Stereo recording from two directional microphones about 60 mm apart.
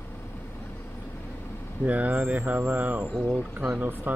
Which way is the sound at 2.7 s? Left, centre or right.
Right.